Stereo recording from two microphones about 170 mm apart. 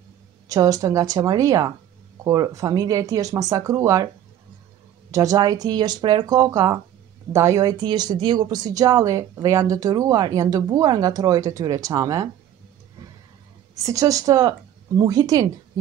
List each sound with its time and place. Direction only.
0.5 s speech: 20° right (ahead or behind)
5.1 s speech: 20° right (ahead or behind)
13.8 s speech: 20° right (ahead or behind)